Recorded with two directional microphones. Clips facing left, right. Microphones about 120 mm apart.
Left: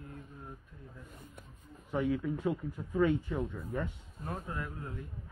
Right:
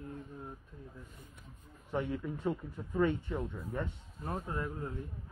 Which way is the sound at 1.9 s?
Centre (ahead or behind).